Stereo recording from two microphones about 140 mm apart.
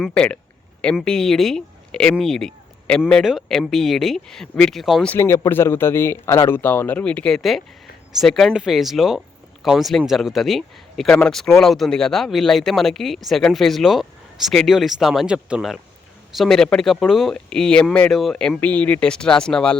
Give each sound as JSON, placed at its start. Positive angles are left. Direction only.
{"t": 0.0, "sound": "speech", "side_deg": 5}
{"t": 5.1, "sound": "speech", "side_deg": 20}